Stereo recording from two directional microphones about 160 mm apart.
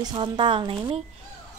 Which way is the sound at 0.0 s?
30° right (ahead or behind).